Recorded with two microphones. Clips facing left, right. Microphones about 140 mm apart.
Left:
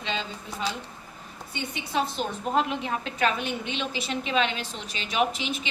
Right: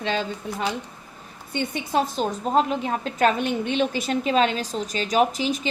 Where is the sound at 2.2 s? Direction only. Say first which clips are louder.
Right 5 dB; 35° right (ahead or behind).